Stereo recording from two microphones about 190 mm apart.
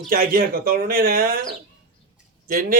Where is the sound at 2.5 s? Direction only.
50° right (ahead or behind).